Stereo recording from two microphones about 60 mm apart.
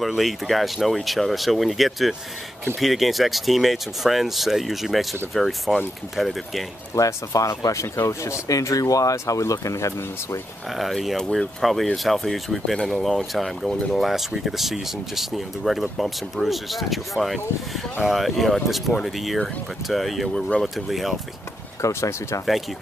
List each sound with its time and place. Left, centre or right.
0.0 s speech: centre
7.0 s speech: left
10.8 s speech: centre
20.3 s speech: centre
20.6 s speech: centre
21.8 s speech: left